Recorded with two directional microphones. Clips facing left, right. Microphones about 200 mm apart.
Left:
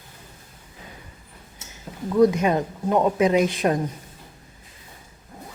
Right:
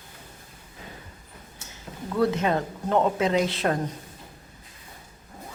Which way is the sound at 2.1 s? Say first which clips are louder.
Left 5 dB; 15° left (ahead or behind).